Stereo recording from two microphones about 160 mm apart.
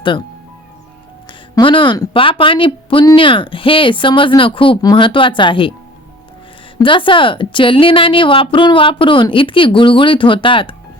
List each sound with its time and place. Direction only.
1.3 s a woman's voice: 30° left (ahead or behind)
6.7 s a woman's voice: 30° left (ahead or behind)